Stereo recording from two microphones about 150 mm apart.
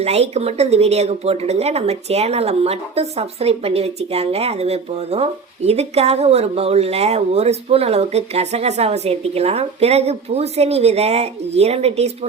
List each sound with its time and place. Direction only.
0.0 s a woman's voice: 45° right (ahead or behind)